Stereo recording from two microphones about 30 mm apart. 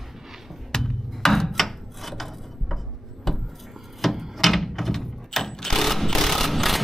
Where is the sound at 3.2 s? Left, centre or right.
Centre.